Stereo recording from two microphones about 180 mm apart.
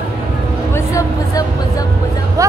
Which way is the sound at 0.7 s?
20° left (ahead or behind).